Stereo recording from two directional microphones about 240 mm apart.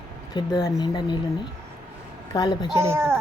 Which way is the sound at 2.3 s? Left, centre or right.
Centre.